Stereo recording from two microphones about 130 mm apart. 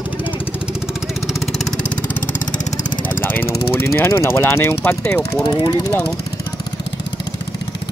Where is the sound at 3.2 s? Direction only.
15° left (ahead or behind).